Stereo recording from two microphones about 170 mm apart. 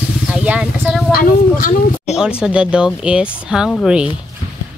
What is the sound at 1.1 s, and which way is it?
Speech, 55° left (ahead or behind).